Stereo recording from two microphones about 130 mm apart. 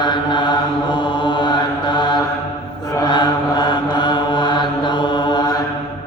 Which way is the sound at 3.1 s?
35° left (ahead or behind).